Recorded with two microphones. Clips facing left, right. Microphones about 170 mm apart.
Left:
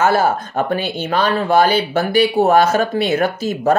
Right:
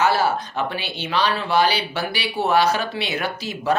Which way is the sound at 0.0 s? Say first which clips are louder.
Left 4 dB; 50° left (ahead or behind).